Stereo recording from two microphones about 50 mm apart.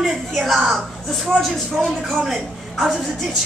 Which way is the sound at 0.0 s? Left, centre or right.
Centre.